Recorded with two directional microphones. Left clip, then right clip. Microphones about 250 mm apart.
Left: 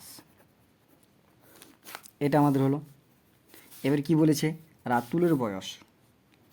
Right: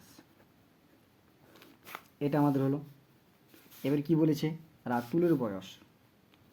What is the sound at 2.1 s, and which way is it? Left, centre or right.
Speech, left.